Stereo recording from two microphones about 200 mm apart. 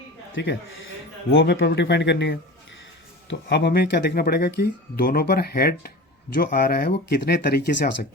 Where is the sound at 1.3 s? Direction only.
75° left (ahead or behind); by 7.6 s 55° left (ahead or behind).